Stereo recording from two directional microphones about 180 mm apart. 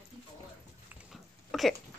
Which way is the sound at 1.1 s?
Centre (ahead or behind).